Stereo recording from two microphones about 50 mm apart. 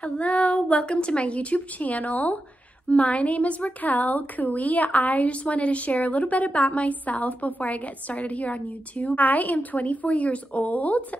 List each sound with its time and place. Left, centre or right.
0.0 s a woman's voice: left